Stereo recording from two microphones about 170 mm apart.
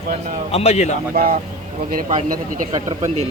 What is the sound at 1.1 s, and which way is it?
Speech, 60° right (ahead or behind).